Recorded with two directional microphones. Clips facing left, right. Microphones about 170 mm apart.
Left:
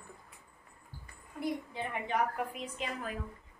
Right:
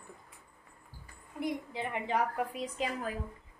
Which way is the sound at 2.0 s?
30° right (ahead or behind).